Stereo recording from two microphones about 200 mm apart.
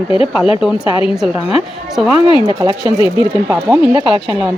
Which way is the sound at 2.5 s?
20° right (ahead or behind).